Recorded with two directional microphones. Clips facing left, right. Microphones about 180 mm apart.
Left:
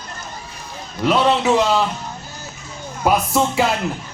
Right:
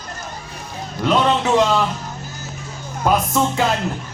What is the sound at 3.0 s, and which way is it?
Speech, 10° left (ahead or behind).